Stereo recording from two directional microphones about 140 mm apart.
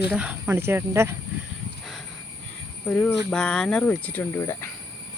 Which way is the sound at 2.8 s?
5° left (ahead or behind).